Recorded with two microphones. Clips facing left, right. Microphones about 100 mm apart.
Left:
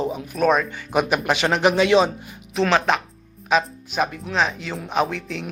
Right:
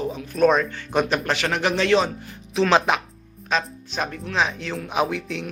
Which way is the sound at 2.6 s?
Centre (ahead or behind).